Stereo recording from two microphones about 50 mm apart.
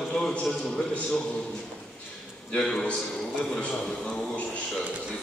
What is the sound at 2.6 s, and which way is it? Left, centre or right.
Speech, centre.